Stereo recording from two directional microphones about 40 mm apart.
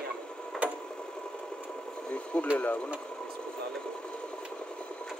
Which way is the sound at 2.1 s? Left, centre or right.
Left.